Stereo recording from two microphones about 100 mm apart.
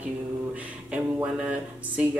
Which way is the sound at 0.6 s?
10° right (ahead or behind).